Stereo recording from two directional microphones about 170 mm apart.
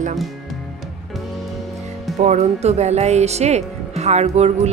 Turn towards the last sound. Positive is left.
turn(degrees=-40)  # may be behind; listen again after turning